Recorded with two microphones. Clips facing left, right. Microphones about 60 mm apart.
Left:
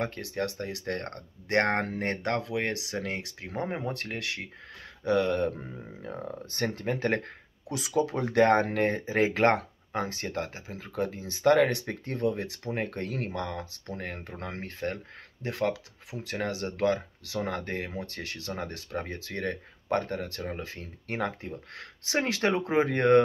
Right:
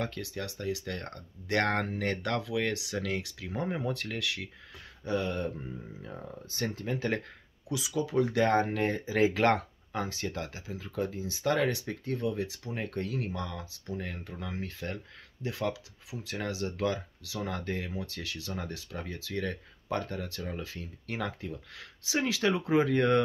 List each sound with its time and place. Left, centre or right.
0.0 s speech: left
5.0 s speech: left
14.3 s speech: left
14.6 s speech: left